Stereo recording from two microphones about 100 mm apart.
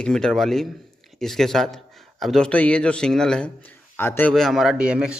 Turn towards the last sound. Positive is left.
turn(degrees=-10)  # may be behind; listen again after turning